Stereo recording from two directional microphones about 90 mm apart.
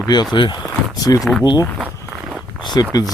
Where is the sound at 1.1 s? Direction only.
35° left (ahead or behind).